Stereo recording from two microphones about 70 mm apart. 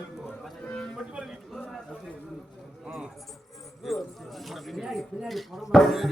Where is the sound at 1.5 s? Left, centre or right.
Centre.